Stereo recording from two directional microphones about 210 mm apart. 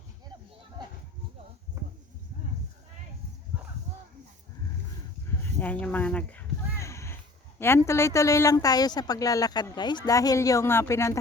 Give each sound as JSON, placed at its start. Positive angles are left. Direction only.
{"t": 0.8, "sound": "children playing", "side_deg": -20}
{"t": 5.4, "sound": "a sound", "side_deg": 10}
{"t": 7.6, "sound": "speech", "side_deg": 10}